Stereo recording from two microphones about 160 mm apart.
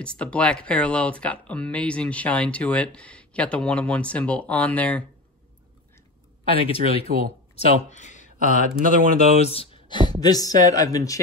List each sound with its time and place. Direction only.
0.0 s speech: 5° left (ahead or behind)
6.4 s speech: 35° left (ahead or behind)
7.5 s speech: 50° left (ahead or behind)
8.5 s speech: 55° right (ahead or behind)
9.4 s speech: 40° left (ahead or behind); by 11.1 s 20° left (ahead or behind)